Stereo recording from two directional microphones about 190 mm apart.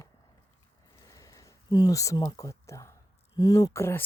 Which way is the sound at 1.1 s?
20° left (ahead or behind).